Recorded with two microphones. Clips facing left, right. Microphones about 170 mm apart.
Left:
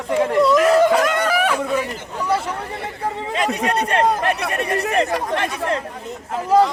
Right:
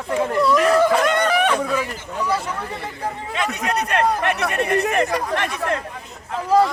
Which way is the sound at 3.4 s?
30° left (ahead or behind).